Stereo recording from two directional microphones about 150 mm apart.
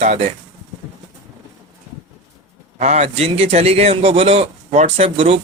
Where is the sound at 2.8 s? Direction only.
45° right (ahead or behind).